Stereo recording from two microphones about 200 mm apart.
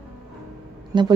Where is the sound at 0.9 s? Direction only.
25° right (ahead or behind).